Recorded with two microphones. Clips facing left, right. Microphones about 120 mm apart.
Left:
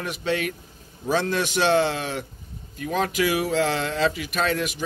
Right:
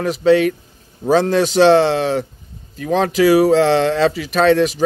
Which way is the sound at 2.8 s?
90° right.